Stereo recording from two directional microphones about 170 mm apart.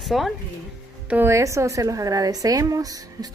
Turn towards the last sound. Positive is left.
turn(degrees=-20)  # may be behind; listen again after turning